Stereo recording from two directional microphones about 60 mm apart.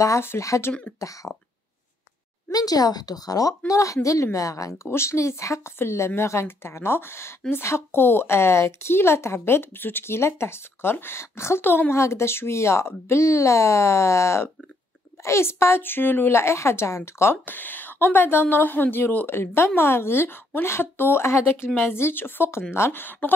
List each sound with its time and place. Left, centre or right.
0.3 s speech: left
0.9 s a woman's voice: left
2.5 s a woman's voice: left
4.8 s a woman's voice: left
11.9 s a woman's voice: left
17.5 s a woman's voice: left